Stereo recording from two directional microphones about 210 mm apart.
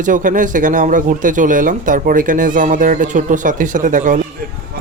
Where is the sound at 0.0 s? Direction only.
40° right (ahead or behind).